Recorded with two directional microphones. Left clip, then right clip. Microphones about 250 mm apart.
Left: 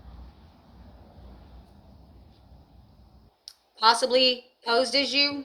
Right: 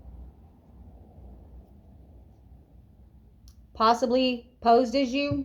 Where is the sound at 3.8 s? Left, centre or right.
Centre.